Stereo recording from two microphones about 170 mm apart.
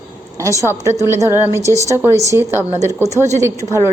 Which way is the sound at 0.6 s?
15° right (ahead or behind).